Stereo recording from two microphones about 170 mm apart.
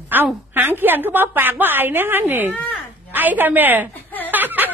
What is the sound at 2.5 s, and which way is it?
Speech, 10° left (ahead or behind).